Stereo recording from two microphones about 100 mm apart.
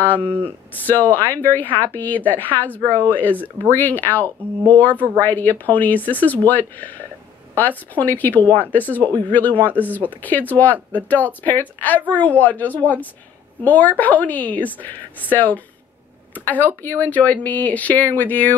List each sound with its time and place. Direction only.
0.0 s speech: 15° left (ahead or behind)